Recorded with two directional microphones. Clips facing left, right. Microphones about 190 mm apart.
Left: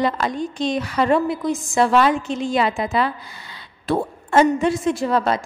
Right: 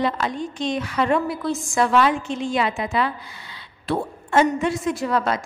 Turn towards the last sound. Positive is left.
turn(degrees=30)  # may be behind; listen again after turning